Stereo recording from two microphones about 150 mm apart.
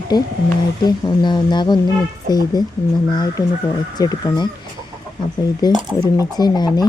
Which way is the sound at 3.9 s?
25° left (ahead or behind).